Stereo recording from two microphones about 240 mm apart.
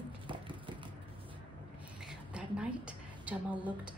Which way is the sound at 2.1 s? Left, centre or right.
Centre.